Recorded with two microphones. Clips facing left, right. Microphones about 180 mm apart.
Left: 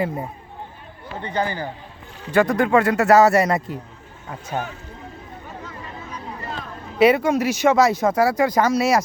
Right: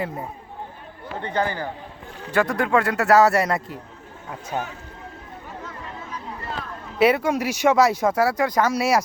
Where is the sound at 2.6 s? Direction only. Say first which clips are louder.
Left 4 dB; centre (ahead or behind).